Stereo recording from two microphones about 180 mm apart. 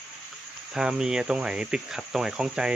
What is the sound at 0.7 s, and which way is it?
Speech, 5° right (ahead or behind).